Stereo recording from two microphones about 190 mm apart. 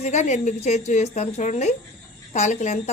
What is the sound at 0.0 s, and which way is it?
A woman's voice, 40° left (ahead or behind).